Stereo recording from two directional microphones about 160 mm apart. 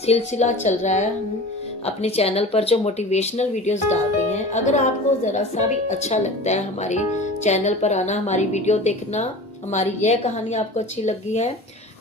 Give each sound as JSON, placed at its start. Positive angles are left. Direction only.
{"t": 0.0, "sound": "speech", "side_deg": 40}